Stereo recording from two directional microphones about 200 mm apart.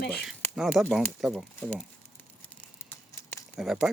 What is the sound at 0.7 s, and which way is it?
Speech, centre (ahead or behind).